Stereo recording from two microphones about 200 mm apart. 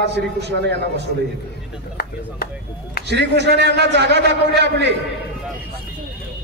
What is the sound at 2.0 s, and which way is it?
Speech, 50° left (ahead or behind).